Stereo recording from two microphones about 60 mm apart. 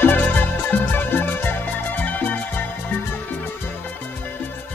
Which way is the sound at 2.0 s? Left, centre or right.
Left.